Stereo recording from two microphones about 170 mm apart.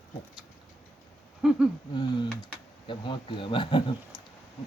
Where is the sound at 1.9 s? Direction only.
25° left (ahead or behind).